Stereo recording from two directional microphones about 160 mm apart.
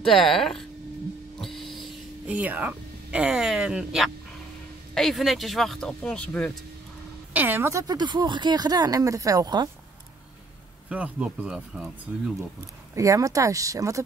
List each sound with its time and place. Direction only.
0.0 s speech: centre (ahead or behind)
1.4 s a sound: centre (ahead or behind)
4.9 s speech: centre (ahead or behind)
7.3 s speech: 10° right (ahead or behind)
10.9 s speech: 10° right (ahead or behind)
12.9 s speech: 20° right (ahead or behind)